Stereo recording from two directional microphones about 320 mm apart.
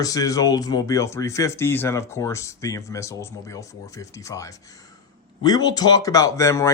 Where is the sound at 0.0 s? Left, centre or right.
Centre.